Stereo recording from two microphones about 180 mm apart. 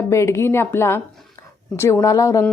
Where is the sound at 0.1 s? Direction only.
15° left (ahead or behind).